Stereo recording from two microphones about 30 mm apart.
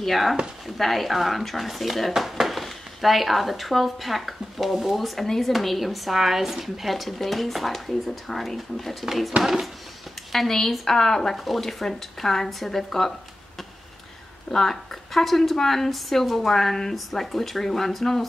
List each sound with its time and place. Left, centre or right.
0.0 s speech: centre
5.2 s a woman's voice: centre
5.5 s speech: centre
9.0 s speech: centre
11.0 s a woman's voice: centre
11.3 s speech: centre
12.2 s a woman's voice: centre
14.5 s a woman's voice: centre